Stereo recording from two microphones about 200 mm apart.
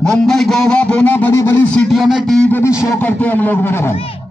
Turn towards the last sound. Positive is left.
turn(degrees=10)  # may be behind; listen again after turning